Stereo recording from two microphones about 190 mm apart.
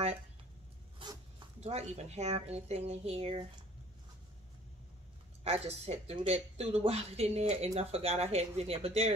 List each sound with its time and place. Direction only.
1.0 s a sound: 25° right (ahead or behind)
1.6 s speech: 35° right (ahead or behind)
5.4 s speech: 35° right (ahead or behind)